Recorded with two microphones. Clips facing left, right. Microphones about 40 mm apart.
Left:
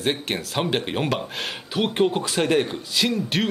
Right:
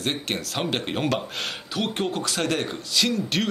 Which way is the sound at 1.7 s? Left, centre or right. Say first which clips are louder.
Left 6 dB; centre.